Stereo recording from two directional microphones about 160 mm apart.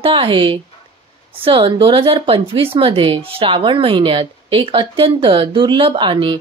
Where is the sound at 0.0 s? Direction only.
35° right (ahead or behind).